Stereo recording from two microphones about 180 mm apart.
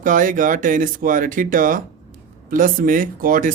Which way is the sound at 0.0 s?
45° right (ahead or behind).